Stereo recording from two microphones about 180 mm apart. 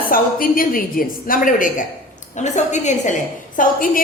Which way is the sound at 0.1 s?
55° left (ahead or behind).